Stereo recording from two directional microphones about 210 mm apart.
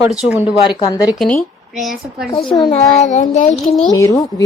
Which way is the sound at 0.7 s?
20° left (ahead or behind).